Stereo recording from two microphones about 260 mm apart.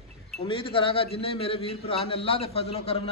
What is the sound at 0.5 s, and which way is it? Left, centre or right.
A man's voice, centre.